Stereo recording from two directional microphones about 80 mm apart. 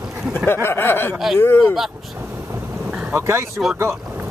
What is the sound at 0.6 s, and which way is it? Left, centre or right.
Speech, left.